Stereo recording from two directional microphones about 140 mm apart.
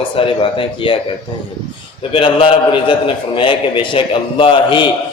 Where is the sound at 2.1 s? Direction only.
40° left (ahead or behind).